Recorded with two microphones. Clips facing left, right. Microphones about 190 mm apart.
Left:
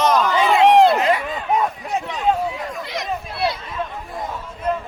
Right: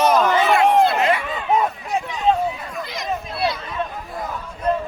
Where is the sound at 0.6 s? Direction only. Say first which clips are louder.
Left 6 dB; 75° left (ahead or behind).